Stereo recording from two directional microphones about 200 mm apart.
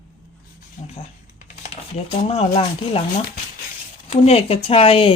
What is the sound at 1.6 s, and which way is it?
Speech, 30° left (ahead or behind).